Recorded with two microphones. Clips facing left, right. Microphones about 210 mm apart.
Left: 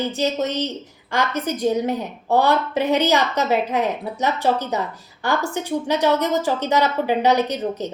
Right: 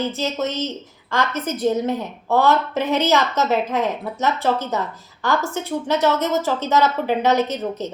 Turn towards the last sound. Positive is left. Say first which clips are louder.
# even
turn(degrees=15)  # may be behind; listen again after turning